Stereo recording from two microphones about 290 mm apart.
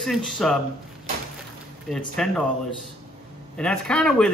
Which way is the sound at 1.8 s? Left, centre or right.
Centre.